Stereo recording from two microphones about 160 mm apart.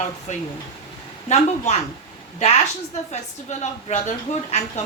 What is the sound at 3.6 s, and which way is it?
Speech, 45° left (ahead or behind).